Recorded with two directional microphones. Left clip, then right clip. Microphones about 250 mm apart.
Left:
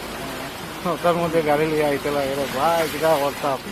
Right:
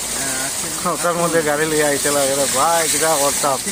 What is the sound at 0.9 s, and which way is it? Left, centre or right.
Speech, centre.